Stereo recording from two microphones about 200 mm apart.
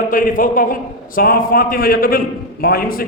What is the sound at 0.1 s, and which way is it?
A man's voice, 45° left (ahead or behind).